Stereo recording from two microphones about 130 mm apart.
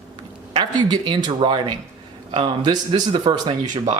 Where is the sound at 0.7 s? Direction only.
35° right (ahead or behind).